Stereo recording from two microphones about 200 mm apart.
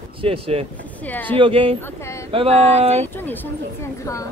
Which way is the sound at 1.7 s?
10° left (ahead or behind).